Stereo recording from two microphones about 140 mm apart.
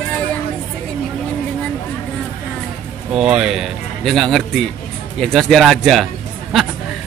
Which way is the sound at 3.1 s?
5° right (ahead or behind).